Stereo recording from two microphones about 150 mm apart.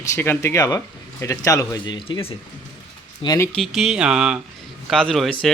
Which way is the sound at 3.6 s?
Centre (ahead or behind).